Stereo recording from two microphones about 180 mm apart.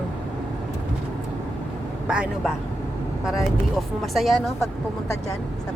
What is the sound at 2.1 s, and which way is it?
Speech, 5° right (ahead or behind).